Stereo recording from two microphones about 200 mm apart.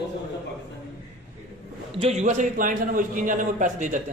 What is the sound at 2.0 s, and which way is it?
A man's voice, 35° right (ahead or behind).